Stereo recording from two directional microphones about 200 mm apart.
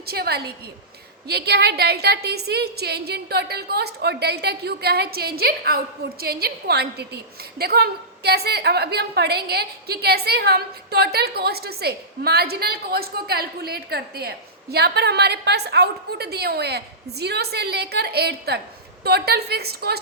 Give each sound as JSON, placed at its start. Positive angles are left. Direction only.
{"t": 0.0, "sound": "a woman's voice", "side_deg": -50}